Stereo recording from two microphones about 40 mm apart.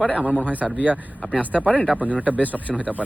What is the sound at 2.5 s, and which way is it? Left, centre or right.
Speech, centre.